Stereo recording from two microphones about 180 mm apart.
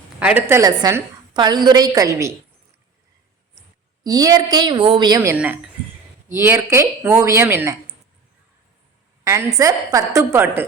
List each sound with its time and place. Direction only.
0.2 s a woman's voice: 10° right (ahead or behind)
4.0 s a woman's voice: 20° right (ahead or behind)
9.2 s speech: 15° right (ahead or behind)